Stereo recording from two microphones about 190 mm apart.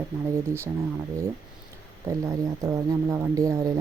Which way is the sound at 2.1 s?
20° right (ahead or behind).